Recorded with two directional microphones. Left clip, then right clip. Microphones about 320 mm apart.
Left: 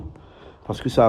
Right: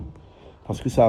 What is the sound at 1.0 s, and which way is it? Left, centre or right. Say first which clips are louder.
Speech: left 1 dB; left.